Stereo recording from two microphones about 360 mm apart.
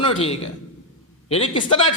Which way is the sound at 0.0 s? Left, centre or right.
Centre.